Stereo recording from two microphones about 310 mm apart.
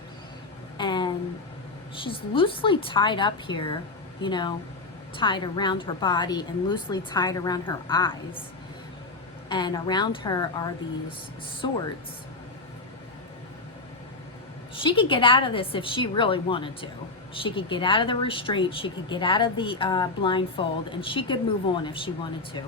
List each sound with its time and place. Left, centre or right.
0.8 s a sound: centre
2.0 s speech: centre
9.5 s speech: centre
14.8 s speech: centre